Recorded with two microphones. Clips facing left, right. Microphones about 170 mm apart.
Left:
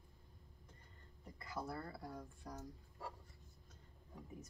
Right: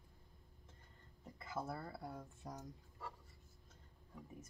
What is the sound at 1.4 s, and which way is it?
Speech, 25° right (ahead or behind).